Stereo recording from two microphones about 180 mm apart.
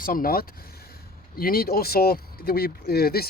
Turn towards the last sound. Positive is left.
turn(degrees=60)  # may be behind; listen again after turning